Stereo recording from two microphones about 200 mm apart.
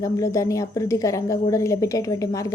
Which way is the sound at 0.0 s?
15° left (ahead or behind).